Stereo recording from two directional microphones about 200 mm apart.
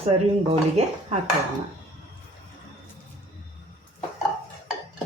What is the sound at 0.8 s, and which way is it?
Dishes, 35° right (ahead or behind).